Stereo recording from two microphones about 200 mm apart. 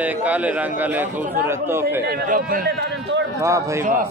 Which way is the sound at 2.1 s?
45° right (ahead or behind).